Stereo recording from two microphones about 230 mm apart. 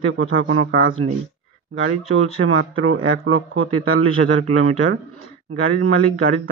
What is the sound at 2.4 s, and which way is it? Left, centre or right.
Speech, right.